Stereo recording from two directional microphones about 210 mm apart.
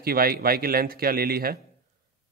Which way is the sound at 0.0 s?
45° right (ahead or behind).